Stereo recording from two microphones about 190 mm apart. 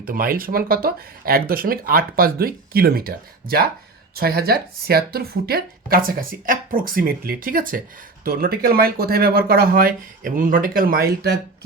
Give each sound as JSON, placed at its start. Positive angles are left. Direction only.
{"t": 0.0, "sound": "speech", "side_deg": -50}